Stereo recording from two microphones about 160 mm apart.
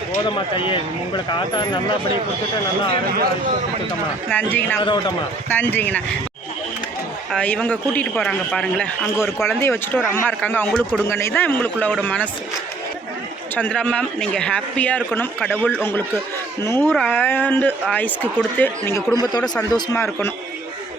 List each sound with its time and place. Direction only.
0.3 s speech: 30° left (ahead or behind)
4.3 s a man's voice: 10° left (ahead or behind)
4.8 s speech: 30° left (ahead or behind)
5.5 s a man's voice: 10° left (ahead or behind)
7.3 s a man's voice: 5° left (ahead or behind)
13.6 s a man's voice: 10° left (ahead or behind)
16.9 s speech: centre (ahead or behind)
17.2 s a man's voice: 10° left (ahead or behind)